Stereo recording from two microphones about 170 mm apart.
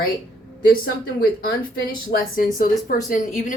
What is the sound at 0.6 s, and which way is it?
A woman's voice, 60° left (ahead or behind).